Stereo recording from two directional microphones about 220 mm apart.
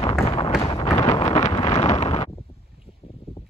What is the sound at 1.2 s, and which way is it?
Wind noise, 25° left (ahead or behind).